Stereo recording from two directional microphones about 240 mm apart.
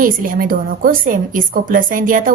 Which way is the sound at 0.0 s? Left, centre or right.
Right.